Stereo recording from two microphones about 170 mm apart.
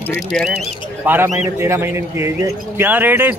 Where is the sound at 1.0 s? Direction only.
10° right (ahead or behind).